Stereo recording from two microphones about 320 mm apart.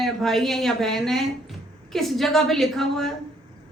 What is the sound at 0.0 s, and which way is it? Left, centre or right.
A woman's voice, centre.